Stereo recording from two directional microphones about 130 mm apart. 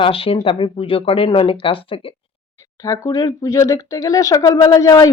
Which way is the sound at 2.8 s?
25° left (ahead or behind).